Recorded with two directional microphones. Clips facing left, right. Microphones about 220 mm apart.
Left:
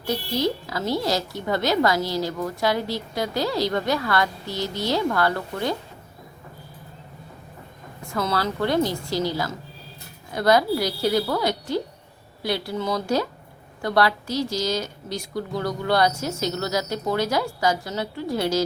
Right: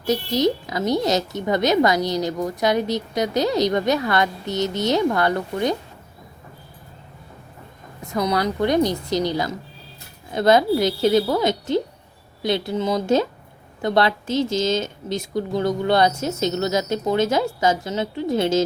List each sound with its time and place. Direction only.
0.1 s a woman's voice: 20° right (ahead or behind)
8.1 s a woman's voice: 20° right (ahead or behind)